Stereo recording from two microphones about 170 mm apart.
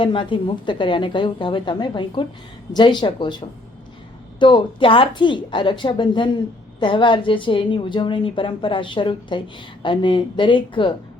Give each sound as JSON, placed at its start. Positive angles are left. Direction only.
{"t": 0.0, "sound": "a woman's voice", "side_deg": 30}